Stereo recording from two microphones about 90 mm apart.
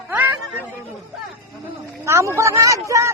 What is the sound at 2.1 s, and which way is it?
Speech, 30° right (ahead or behind).